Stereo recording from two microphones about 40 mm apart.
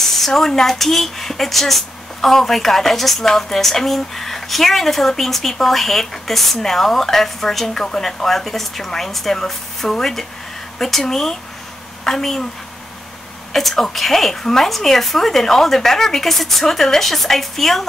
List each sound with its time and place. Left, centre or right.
0.0 s a woman's voice: centre
13.5 s a woman's voice: centre